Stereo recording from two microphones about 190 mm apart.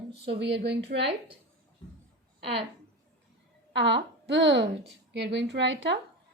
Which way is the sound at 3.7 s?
70° right (ahead or behind).